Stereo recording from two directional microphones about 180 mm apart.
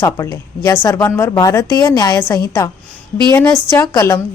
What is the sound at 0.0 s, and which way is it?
A woman's voice, 15° left (ahead or behind).